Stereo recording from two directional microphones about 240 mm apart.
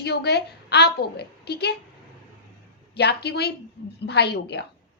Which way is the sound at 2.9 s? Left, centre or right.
Left.